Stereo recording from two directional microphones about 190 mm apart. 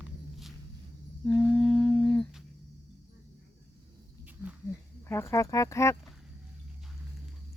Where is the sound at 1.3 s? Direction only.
5° left (ahead or behind).